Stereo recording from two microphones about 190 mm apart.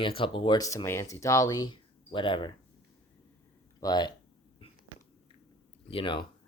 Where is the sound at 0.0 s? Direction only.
25° left (ahead or behind).